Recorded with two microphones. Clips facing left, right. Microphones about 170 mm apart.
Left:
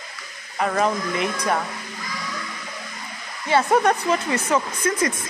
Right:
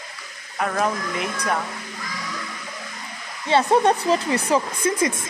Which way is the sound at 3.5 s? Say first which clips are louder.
Right 1 dB; 25° right (ahead or behind).